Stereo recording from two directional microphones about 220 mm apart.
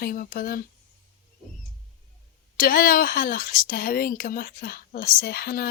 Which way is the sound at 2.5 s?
40° left (ahead or behind).